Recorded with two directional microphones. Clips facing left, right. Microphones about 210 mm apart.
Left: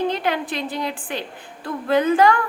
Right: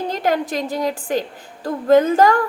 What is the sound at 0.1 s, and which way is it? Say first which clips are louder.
A woman's voice: right 3 dB; 45° right (ahead or behind).